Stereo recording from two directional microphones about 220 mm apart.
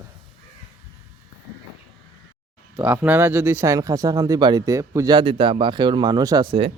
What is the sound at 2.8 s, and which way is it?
Speech, 10° right (ahead or behind).